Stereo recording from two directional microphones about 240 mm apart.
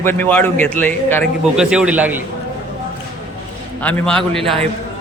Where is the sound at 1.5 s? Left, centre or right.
Centre.